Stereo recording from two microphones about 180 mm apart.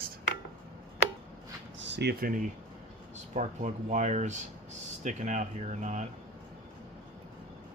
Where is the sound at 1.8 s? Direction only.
75° right (ahead or behind).